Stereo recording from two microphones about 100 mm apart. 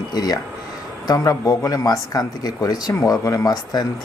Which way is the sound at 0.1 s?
40° left (ahead or behind).